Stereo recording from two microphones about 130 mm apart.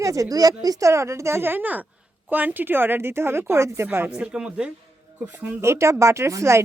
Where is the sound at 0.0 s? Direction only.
25° right (ahead or behind).